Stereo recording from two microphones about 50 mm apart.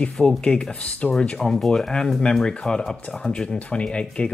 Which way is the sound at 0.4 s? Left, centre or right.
Centre.